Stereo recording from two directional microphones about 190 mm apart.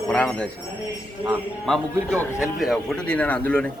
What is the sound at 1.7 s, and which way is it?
A man's voice, centre (ahead or behind).